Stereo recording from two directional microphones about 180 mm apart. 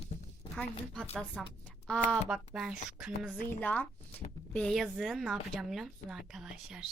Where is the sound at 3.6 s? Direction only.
10° left (ahead or behind).